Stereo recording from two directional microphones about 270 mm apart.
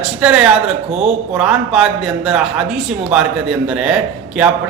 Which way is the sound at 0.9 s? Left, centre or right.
Right.